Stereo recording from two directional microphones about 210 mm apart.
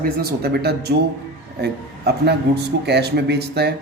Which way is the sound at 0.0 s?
45° right (ahead or behind).